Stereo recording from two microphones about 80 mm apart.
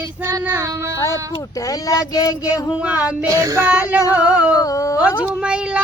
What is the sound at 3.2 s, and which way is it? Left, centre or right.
Child singing, right.